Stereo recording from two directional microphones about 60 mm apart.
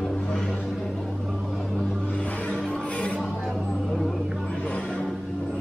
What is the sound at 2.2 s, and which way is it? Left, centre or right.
Music, centre.